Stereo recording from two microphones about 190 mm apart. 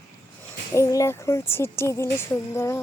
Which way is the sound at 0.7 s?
15° left (ahead or behind).